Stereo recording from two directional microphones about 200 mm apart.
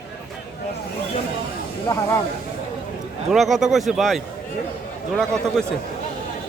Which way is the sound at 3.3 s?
Centre (ahead or behind).